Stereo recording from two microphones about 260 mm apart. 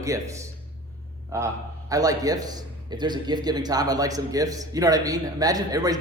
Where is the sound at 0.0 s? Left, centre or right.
Centre.